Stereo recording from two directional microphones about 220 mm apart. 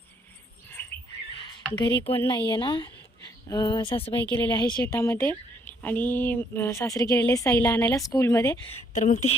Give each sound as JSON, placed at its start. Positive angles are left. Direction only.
{"t": 2.0, "sound": "a woman's voice", "side_deg": 10}
{"t": 2.5, "sound": "speech", "side_deg": 20}
{"t": 4.2, "sound": "a woman's voice", "side_deg": 10}
{"t": 8.7, "sound": "speech", "side_deg": 35}